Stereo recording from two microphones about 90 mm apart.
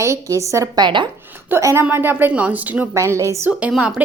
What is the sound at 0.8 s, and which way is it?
Speech, 60° right (ahead or behind).